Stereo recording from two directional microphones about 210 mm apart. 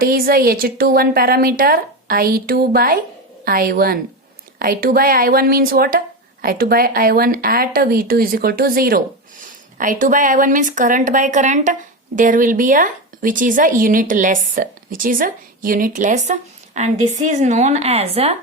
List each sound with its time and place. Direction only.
0.0 s a woman's voice: 45° right (ahead or behind)